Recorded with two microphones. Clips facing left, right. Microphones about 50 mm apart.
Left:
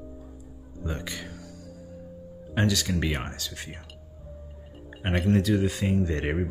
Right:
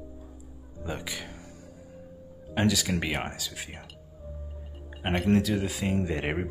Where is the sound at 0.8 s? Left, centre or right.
Centre.